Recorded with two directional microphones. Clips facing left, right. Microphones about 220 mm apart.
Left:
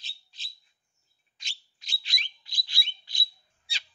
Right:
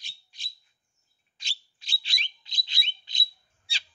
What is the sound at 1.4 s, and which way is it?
Bird, 30° right (ahead or behind).